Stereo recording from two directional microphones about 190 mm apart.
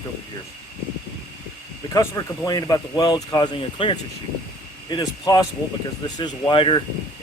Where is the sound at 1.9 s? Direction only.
15° left (ahead or behind).